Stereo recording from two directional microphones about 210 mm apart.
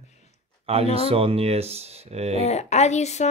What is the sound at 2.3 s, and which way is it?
Speech, 30° left (ahead or behind).